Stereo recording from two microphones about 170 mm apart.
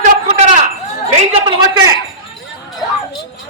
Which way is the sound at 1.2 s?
30° right (ahead or behind).